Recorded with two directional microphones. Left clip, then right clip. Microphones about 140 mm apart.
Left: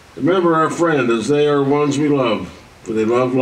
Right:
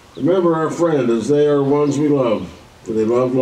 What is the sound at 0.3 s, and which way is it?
A man's voice, 25° left (ahead or behind).